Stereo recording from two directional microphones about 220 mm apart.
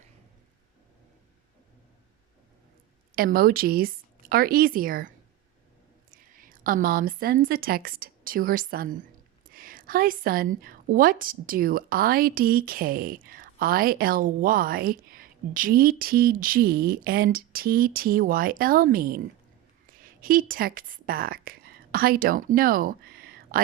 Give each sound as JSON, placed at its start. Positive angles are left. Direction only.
{"t": 3.2, "sound": "a woman's voice", "side_deg": -40}
{"t": 20.2, "sound": "a woman's voice", "side_deg": -40}